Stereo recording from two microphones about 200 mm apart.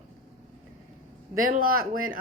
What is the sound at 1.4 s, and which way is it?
Speech, 45° right (ahead or behind).